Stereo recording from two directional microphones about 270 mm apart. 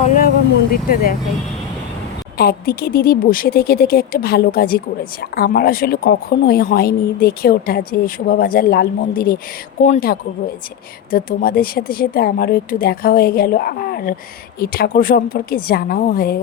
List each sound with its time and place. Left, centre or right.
0.0 s vehicle: left
2.4 s a woman's voice: left